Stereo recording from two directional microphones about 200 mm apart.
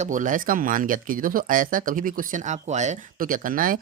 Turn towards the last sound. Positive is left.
turn(degrees=-45)  # may be behind; listen again after turning